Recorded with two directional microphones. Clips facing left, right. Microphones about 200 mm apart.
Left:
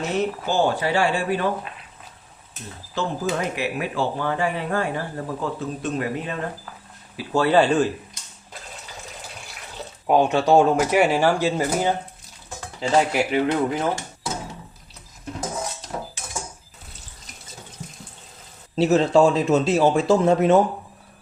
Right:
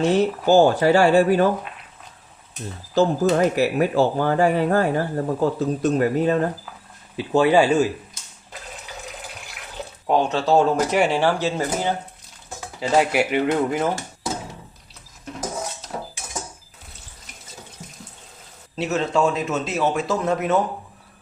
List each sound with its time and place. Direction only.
0.1 s speech: 40° right (ahead or behind)
2.9 s speech: 40° right (ahead or behind)
7.2 s speech: 15° right (ahead or behind)
10.1 s speech: 15° left (ahead or behind)
12.5 s speech: 5° right (ahead or behind)
18.8 s speech: 35° left (ahead or behind)